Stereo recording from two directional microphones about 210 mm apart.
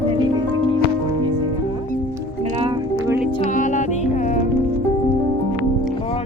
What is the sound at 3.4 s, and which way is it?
Music, 35° left (ahead or behind).